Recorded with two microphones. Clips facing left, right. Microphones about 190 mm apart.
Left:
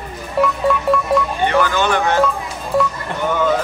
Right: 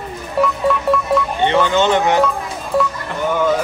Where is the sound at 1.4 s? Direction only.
20° right (ahead or behind).